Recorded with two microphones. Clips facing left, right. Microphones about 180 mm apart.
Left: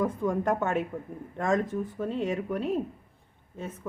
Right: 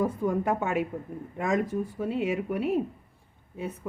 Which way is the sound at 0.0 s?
10° right (ahead or behind).